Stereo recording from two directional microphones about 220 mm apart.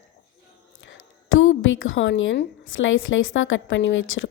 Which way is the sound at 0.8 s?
60° left (ahead or behind).